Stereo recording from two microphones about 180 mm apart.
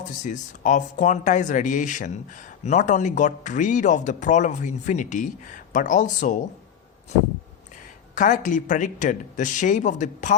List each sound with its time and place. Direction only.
0.3 s a man's voice: 45° left (ahead or behind)
8.1 s a man's voice: 45° left (ahead or behind)